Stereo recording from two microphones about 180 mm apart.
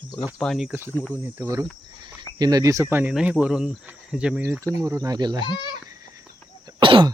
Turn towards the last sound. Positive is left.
turn(degrees=-25)  # may be behind; listen again after turning